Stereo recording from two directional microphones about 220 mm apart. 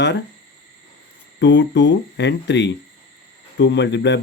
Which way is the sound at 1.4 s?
50° left (ahead or behind).